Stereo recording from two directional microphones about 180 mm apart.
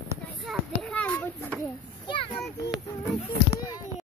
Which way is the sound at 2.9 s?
15° left (ahead or behind).